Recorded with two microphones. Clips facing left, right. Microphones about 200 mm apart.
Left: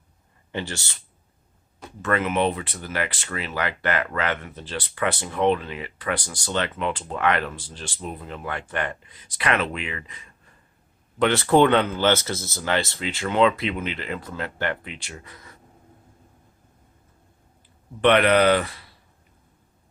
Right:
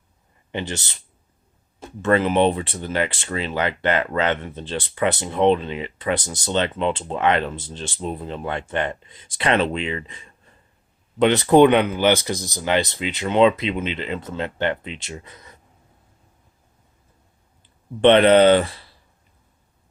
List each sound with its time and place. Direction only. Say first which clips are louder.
0.5 s speech: right 3 dB; 20° right (ahead or behind)
18.0 s speech: right 5 dB; 25° right (ahead or behind)